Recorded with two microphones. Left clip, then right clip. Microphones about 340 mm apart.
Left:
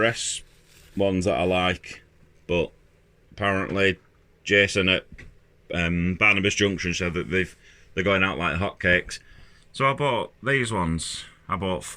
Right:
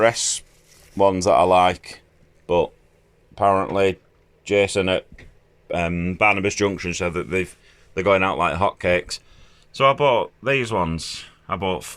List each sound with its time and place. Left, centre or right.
0.0 s speech: centre
1.4 s speech: right
3.3 s speech: right
5.7 s a man's voice: centre